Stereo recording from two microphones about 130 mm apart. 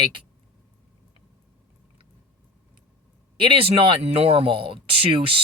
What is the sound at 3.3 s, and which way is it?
Speech, 40° right (ahead or behind).